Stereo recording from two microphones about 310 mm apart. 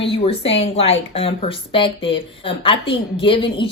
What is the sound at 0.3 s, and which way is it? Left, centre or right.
Speech, centre.